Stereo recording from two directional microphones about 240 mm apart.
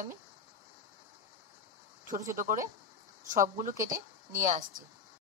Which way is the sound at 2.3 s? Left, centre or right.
Right.